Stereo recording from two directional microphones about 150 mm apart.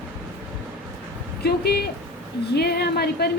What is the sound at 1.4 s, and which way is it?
A woman's voice, 90° left.